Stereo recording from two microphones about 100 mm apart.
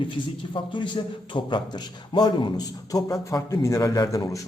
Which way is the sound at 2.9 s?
35° left (ahead or behind).